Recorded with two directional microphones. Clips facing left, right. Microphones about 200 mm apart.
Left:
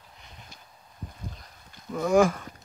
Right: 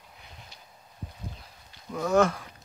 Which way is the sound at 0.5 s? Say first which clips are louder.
Left 1 dB; 50° left (ahead or behind).